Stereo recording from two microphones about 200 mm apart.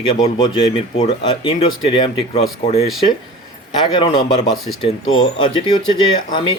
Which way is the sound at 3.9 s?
25° left (ahead or behind).